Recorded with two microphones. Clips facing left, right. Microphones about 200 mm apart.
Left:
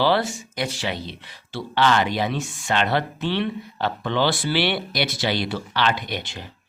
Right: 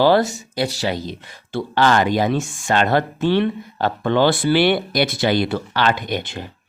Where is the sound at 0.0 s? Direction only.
45° right (ahead or behind).